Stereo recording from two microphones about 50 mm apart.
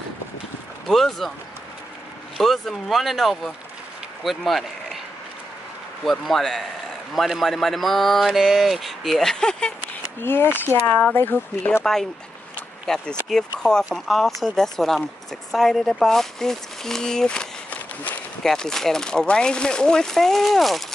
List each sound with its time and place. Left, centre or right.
0.8 s speech: centre
2.3 s speech: centre
6.0 s speech: centre
10.2 s speech: left
11.8 s speech: centre